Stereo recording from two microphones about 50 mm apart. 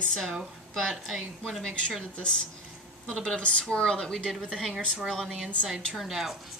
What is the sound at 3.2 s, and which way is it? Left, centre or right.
Speech, left.